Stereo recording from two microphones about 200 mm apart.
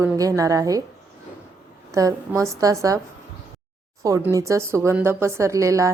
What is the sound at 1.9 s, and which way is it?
A woman's voice, 15° right (ahead or behind).